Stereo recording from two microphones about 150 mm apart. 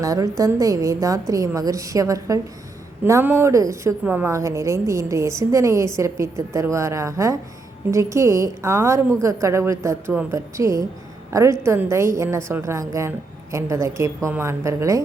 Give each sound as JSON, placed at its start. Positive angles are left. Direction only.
{"t": 0.0, "sound": "a woman's voice", "side_deg": -20}